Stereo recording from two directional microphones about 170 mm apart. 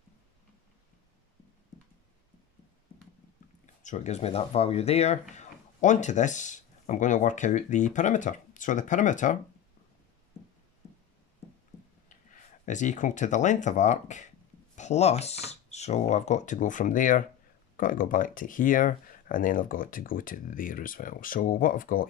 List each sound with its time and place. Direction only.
3.6 s speech: 45° left (ahead or behind)
12.6 s speech: 45° left (ahead or behind)